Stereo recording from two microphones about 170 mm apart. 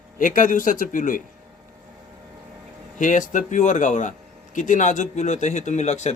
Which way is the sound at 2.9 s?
50° left (ahead or behind).